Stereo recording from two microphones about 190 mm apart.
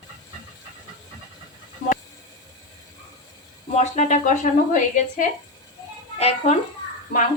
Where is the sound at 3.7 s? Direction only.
40° left (ahead or behind).